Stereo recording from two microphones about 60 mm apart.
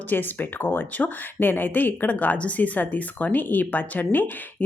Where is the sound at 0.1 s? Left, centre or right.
Left.